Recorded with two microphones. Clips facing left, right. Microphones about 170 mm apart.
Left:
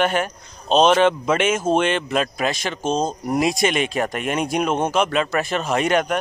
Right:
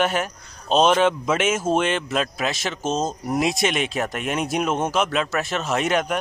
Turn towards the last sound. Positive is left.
turn(degrees=0)  # may be behind; listen again after turning